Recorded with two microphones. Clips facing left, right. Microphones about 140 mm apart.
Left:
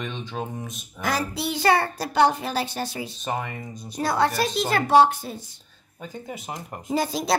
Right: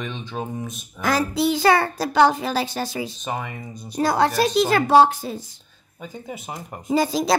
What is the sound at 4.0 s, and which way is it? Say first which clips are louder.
A child's voice: right 4 dB; 90° right.